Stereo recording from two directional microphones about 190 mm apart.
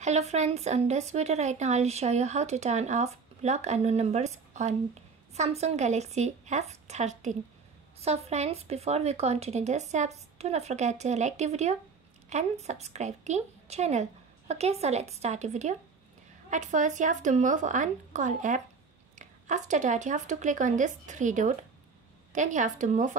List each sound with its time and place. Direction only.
0.0 s speech: 35° right (ahead or behind)